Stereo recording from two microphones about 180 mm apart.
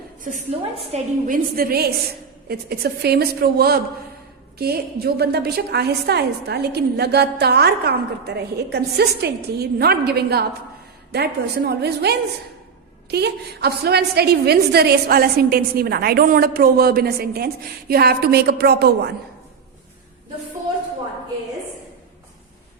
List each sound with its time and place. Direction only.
0.8 s a woman's voice: 35° right (ahead or behind)
1.5 s a woman's voice: 55° right (ahead or behind)